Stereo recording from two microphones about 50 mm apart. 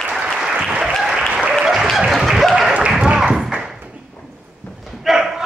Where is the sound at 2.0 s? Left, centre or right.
Centre.